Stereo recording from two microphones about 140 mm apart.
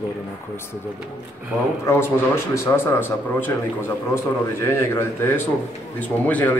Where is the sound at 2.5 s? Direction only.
15° left (ahead or behind).